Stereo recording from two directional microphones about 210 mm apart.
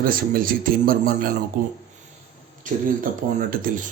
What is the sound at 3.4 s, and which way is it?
Speech, 40° right (ahead or behind).